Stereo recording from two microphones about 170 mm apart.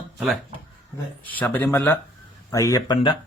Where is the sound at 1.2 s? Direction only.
10° left (ahead or behind).